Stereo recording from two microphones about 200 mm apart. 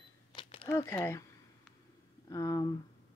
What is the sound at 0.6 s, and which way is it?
Speech, 15° left (ahead or behind).